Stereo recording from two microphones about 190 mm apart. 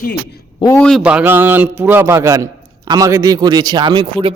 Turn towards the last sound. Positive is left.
turn(degrees=-25)  # may be behind; listen again after turning